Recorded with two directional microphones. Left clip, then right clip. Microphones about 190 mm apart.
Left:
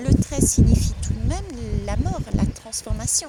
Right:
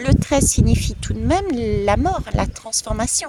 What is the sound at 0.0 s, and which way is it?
A woman's voice, 25° right (ahead or behind).